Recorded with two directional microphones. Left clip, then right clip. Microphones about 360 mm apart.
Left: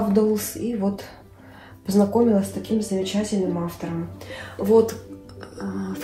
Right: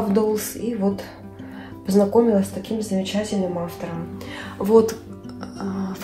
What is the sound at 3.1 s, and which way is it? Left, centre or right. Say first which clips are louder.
Speech: right 1 dB; right.